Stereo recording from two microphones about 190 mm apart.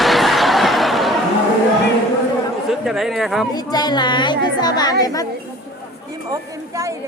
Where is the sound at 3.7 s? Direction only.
20° left (ahead or behind).